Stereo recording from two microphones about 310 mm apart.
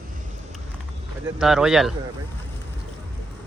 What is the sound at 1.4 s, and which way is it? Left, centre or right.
Speech, centre.